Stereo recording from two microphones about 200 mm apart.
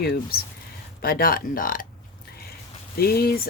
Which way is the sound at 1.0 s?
45° left (ahead or behind).